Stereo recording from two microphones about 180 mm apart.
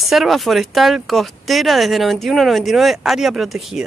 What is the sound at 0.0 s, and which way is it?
Speech, centre (ahead or behind).